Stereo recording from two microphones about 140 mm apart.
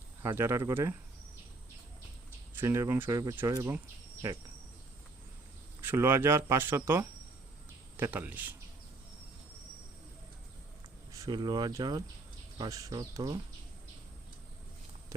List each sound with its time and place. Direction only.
0.2 s speech: 20° right (ahead or behind)
2.6 s speech: 20° right (ahead or behind)
5.8 s speech: 15° right (ahead or behind)
11.1 s speech: 25° right (ahead or behind)